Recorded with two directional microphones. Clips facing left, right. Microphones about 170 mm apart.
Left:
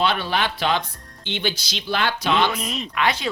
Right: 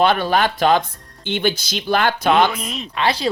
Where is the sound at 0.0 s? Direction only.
50° right (ahead or behind).